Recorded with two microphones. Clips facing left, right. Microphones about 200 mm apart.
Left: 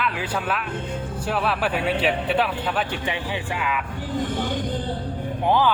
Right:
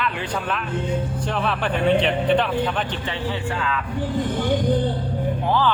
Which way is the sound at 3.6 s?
15° left (ahead or behind).